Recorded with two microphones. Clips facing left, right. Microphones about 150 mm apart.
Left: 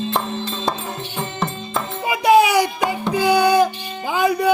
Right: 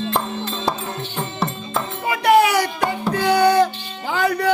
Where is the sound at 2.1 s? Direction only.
10° left (ahead or behind).